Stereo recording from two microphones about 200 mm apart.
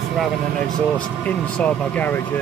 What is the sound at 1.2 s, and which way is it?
Speech, 10° left (ahead or behind).